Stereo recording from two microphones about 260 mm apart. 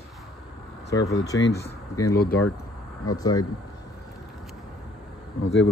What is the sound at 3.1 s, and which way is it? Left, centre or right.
Speech, centre.